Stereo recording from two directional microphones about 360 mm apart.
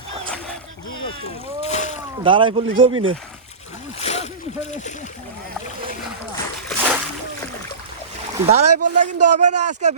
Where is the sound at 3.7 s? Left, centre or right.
Centre.